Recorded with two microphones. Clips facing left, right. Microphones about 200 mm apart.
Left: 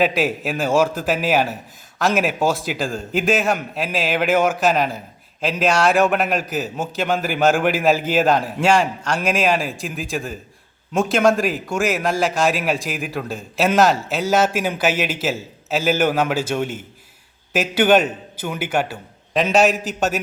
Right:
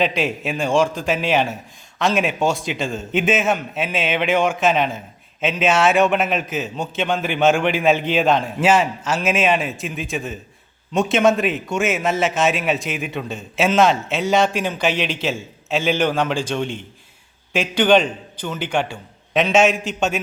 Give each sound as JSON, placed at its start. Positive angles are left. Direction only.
{"t": 0.0, "sound": "a man's voice", "side_deg": 5}